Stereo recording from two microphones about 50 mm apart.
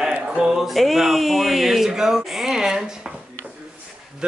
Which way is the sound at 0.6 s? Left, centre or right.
Centre.